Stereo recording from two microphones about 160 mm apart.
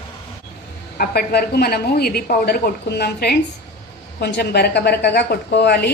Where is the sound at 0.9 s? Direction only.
75° left (ahead or behind).